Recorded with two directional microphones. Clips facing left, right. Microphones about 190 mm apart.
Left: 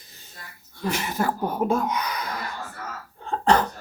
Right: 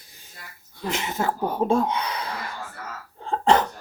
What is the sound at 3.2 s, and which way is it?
Cough, 25° right (ahead or behind).